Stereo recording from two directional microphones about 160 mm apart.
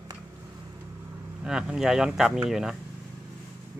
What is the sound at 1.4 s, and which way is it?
Speech, 5° right (ahead or behind).